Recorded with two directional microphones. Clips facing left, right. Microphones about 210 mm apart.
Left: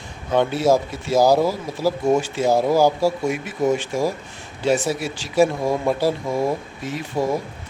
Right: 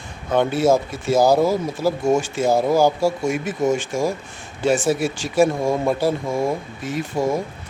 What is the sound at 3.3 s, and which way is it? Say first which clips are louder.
Speech: right 2 dB; 45° right (ahead or behind).